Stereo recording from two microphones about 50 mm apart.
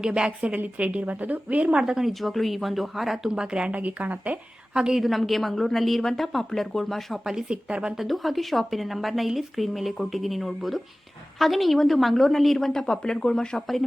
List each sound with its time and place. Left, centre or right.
0.0 s speech: centre
0.3 s a woman's voice: right
1.8 s speech: centre
2.1 s speech: centre
3.2 s speech: centre
3.7 s speech: right
4.7 s speech: centre
5.0 s speech: centre
7.3 s speech: centre
7.9 s speech: centre